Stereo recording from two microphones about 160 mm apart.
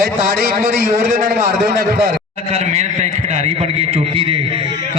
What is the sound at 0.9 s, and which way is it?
Speech, 50° right (ahead or behind).